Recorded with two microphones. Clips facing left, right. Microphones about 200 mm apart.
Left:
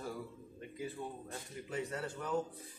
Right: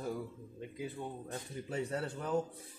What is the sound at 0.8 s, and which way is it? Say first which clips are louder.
Speech: right 1 dB; 20° right (ahead or behind).